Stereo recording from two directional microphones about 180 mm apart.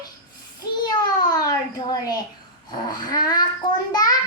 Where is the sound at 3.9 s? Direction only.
20° left (ahead or behind).